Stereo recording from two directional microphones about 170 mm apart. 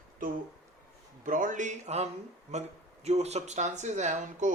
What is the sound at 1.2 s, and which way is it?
Speech, 50° right (ahead or behind).